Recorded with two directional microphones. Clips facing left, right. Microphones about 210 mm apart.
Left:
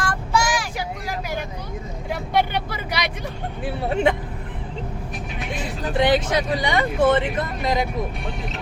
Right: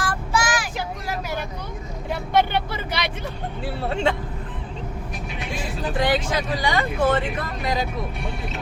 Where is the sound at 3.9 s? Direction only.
15° left (ahead or behind).